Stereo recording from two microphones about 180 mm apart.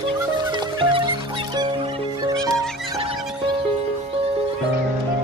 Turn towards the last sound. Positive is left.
turn(degrees=-35)  # may be behind; listen again after turning